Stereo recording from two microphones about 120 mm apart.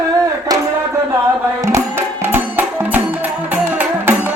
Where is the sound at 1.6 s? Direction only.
20° right (ahead or behind).